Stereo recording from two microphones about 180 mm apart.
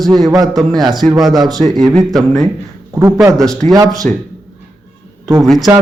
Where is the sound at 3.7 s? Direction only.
20° right (ahead or behind).